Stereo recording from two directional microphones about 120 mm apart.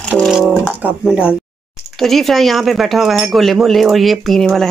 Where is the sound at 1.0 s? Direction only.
10° right (ahead or behind).